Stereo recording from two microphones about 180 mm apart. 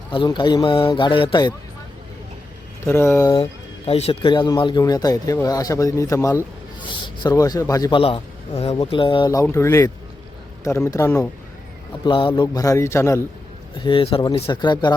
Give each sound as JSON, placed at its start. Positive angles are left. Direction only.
{"t": 0.1, "sound": "speech", "side_deg": 25}
{"t": 2.8, "sound": "a man's voice", "side_deg": 15}
{"t": 3.3, "sound": "a man's voice", "side_deg": 35}
{"t": 12.0, "sound": "a man's voice", "side_deg": 25}
{"t": 13.7, "sound": "speech", "side_deg": 25}